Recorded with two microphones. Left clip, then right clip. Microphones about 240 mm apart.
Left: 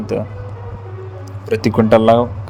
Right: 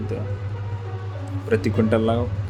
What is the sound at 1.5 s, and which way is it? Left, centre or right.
Speech, left.